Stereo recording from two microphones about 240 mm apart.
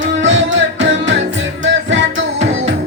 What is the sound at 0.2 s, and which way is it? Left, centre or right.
Music, right.